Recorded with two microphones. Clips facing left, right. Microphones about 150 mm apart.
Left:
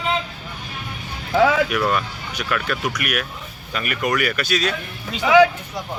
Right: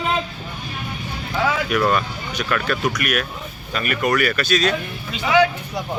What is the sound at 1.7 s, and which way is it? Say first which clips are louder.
Speech: right 2 dB; 5° left (ahead or behind).